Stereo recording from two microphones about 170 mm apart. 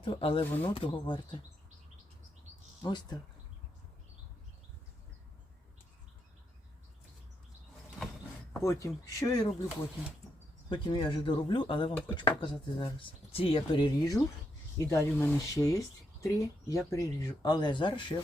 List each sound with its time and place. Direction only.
0.0 s speech: 30° left (ahead or behind)
2.8 s speech: 25° left (ahead or behind)
8.5 s speech: 15° left (ahead or behind)
10.7 s speech: 25° left (ahead or behind)